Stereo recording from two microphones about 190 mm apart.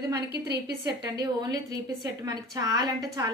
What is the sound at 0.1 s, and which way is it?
Speech, 60° right (ahead or behind).